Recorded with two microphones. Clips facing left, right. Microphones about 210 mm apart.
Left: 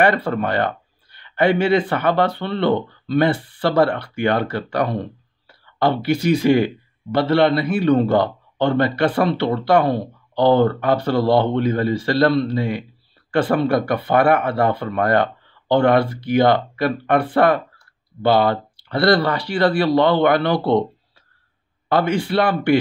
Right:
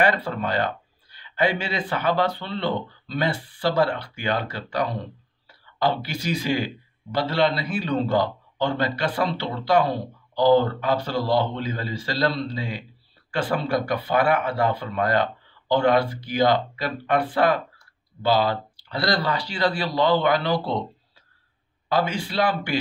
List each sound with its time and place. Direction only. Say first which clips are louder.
0.0 s a man's voice: left 5 dB; 60° left (ahead or behind)
21.8 s a man's voice: left 5 dB; 60° left (ahead or behind)